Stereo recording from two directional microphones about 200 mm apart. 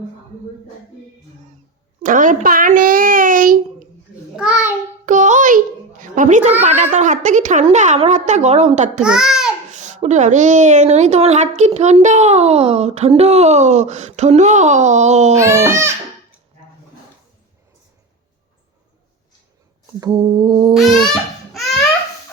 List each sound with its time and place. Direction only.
2.0 s a child's voice: 40° right (ahead or behind)
4.4 s a child's voice: 5° right (ahead or behind)
5.0 s a sound: 40° right (ahead or behind)
6.6 s a woman's voice: 35° right (ahead or behind)
9.0 s a child's voice: 5° right (ahead or behind)
9.7 s a woman's voice: 35° right (ahead or behind)
15.4 s speech: 15° right (ahead or behind)
20.0 s a sound: 20° right (ahead or behind)
20.7 s a sound: centre (ahead or behind)